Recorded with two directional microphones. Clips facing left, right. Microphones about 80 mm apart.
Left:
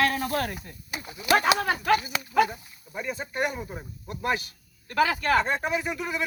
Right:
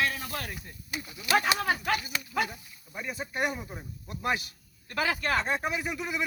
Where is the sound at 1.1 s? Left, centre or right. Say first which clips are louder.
Left 9 dB; left.